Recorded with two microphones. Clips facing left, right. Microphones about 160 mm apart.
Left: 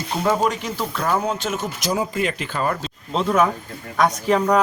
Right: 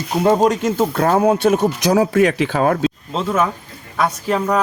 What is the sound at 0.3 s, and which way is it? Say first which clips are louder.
Speech: right 6 dB; 35° right (ahead or behind).